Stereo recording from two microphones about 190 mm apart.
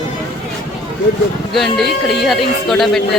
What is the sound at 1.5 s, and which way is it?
Speech, centre (ahead or behind).